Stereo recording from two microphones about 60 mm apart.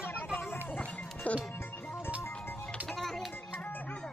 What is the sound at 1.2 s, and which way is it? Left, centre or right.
Speech, left.